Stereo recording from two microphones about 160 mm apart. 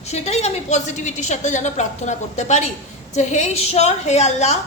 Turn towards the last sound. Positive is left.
turn(degrees=45)  # may be behind; listen again after turning